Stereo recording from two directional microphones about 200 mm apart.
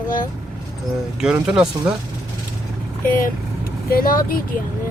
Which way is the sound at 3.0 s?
45° left (ahead or behind).